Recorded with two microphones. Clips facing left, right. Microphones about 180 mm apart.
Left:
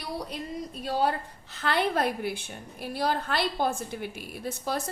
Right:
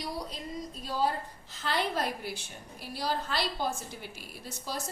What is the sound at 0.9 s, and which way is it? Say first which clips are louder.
A woman's voice: left 4 dB; 65° left (ahead or behind).